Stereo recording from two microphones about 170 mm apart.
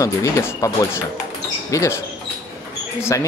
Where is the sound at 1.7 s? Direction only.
20° left (ahead or behind).